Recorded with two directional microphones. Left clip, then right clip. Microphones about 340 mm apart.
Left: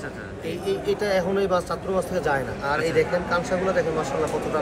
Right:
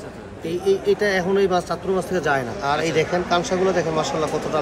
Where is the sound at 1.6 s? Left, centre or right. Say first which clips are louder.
Right 2 dB; centre.